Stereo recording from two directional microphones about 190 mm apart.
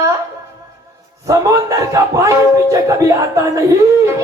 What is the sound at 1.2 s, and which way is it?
Speech, 15° right (ahead or behind).